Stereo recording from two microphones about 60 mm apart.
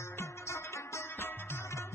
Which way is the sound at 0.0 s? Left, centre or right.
Left.